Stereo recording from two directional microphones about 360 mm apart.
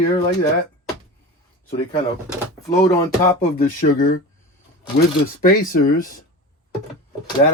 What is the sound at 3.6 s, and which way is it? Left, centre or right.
Speech, left.